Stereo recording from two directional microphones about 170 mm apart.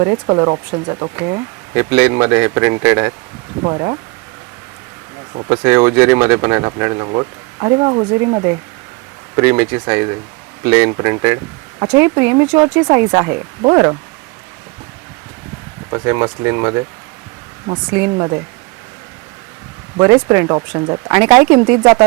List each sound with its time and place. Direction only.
0.0 s speech: 15° right (ahead or behind)
5.5 s speech: 10° right (ahead or behind)
16.0 s speech: 10° right (ahead or behind)
20.0 s speech: 10° right (ahead or behind)
21.8 s speech: 25° right (ahead or behind)